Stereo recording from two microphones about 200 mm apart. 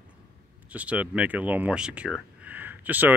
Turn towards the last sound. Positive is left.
turn(degrees=-10)  # may be behind; listen again after turning